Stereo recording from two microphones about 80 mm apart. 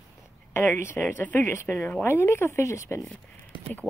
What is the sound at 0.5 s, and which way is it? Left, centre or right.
A woman's voice, left.